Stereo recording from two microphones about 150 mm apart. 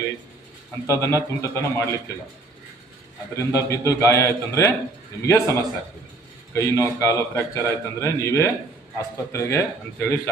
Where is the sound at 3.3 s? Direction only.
20° left (ahead or behind).